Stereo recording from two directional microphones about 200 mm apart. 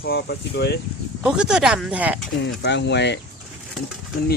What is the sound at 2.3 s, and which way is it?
Speech, 60° left (ahead or behind).